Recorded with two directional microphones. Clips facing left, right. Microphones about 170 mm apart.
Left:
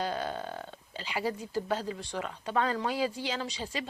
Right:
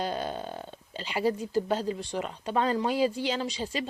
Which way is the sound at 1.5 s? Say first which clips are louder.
Right 4 dB; 25° right (ahead or behind).